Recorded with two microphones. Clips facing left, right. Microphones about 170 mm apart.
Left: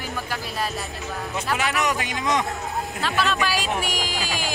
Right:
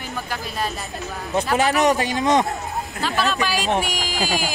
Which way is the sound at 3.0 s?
Centre (ahead or behind).